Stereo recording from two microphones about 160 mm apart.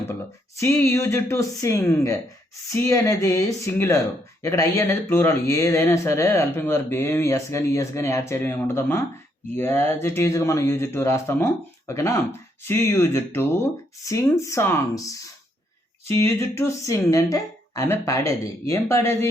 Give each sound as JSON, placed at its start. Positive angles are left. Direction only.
{"t": 0.6, "sound": "speech", "side_deg": 15}